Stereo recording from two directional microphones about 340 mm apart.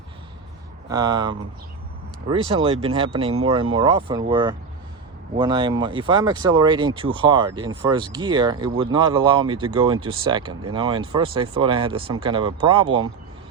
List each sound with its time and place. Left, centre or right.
0.9 s speech: centre